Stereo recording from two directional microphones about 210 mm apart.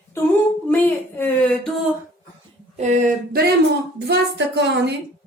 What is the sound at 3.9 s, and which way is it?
Speech, 55° right (ahead or behind).